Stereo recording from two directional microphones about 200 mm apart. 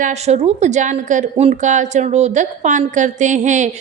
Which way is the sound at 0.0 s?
35° right (ahead or behind).